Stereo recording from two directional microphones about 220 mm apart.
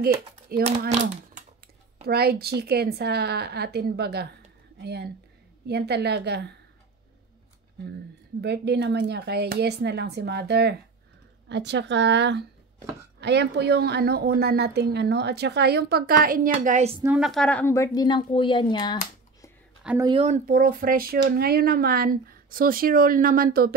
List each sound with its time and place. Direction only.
0.7 s speech: 30° right (ahead or behind)
2.0 s a woman's voice: 45° right (ahead or behind)
8.4 s a woman's voice: 50° right (ahead or behind); by 16.9 s 35° right (ahead or behind)
17.0 s a woman's voice: 5° right (ahead or behind); by 18.9 s 20° left (ahead or behind)
19.8 s speech: 5° right (ahead or behind)
20.1 s speech: 30° right (ahead or behind)